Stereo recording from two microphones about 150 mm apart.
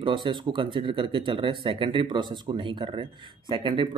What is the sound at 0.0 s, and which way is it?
Speech, 35° right (ahead or behind).